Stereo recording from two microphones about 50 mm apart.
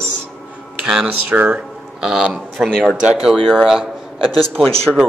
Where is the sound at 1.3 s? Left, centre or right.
Right.